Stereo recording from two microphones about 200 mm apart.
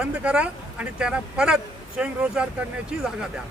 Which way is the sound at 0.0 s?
5° right (ahead or behind).